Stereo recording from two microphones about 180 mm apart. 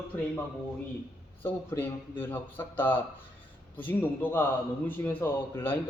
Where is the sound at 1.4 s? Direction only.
10° left (ahead or behind).